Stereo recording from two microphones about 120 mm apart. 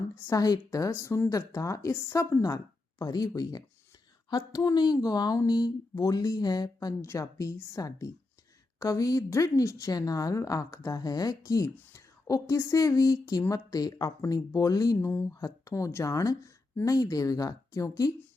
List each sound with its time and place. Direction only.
0.3 s a woman's voice: 30° left (ahead or behind)